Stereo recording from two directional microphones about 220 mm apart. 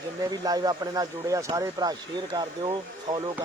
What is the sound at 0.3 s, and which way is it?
Speech, 15° right (ahead or behind).